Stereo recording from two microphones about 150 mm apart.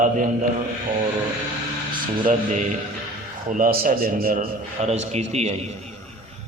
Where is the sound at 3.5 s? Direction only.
65° right (ahead or behind).